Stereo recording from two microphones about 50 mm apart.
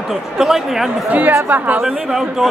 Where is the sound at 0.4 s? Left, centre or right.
Centre.